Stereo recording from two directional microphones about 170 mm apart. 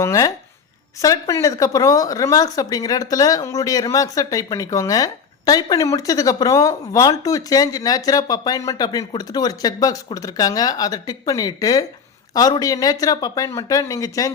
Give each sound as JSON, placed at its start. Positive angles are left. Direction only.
{"t": 0.0, "sound": "speech", "side_deg": 20}